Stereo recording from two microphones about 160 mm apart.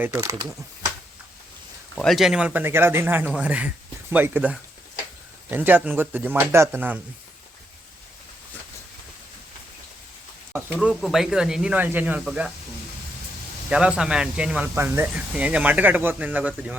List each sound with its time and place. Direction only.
0.2 s speech: 25° right (ahead or behind)
2.0 s speech: centre (ahead or behind)
10.8 s speech: 5° right (ahead or behind)
13.7 s speech: 5° right (ahead or behind)